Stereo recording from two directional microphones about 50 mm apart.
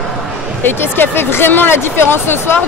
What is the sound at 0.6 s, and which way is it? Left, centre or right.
Speech, left.